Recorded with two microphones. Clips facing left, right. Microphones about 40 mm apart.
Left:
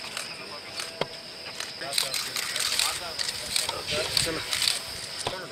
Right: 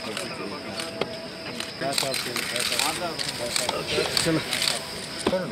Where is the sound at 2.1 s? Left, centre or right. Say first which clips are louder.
Right 4 dB; centre.